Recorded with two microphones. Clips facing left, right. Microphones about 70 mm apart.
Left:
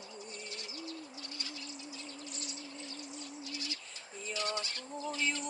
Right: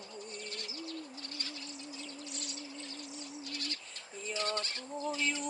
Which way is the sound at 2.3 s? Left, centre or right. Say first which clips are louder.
Right 1 dB; right.